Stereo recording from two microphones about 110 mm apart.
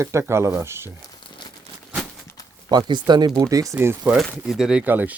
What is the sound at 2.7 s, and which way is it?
Speech, 40° right (ahead or behind).